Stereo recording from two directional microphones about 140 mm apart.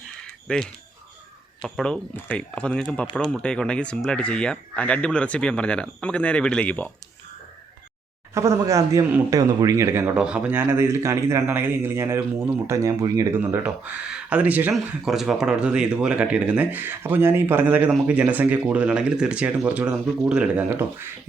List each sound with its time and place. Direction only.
0.4 s speech: 5° left (ahead or behind)
8.3 s a man's voice: 20° right (ahead or behind)
10.2 s a man's voice: 10° right (ahead or behind)